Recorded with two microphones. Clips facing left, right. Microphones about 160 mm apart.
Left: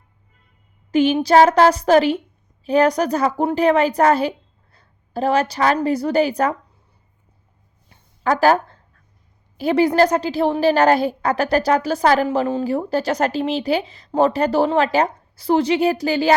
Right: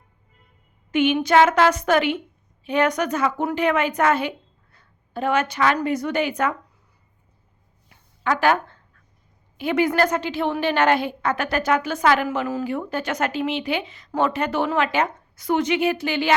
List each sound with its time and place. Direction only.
0.9 s a woman's voice: 35° left (ahead or behind)
7.9 s a sound: 35° left (ahead or behind)
9.6 s a woman's voice: 35° left (ahead or behind)